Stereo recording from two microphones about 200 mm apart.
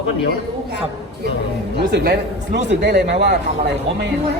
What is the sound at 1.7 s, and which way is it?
Speech, 55° right (ahead or behind).